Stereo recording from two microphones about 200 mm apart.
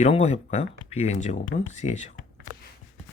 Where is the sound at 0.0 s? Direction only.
30° left (ahead or behind).